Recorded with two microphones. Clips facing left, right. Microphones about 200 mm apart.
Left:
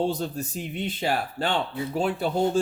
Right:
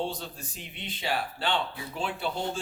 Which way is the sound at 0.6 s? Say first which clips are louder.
Left 7 dB; 45° left (ahead or behind).